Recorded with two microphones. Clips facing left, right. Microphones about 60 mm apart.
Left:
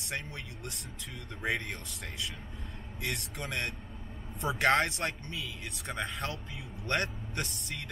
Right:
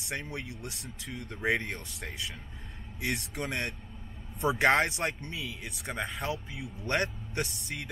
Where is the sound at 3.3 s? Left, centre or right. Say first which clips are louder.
Right 2 dB; centre.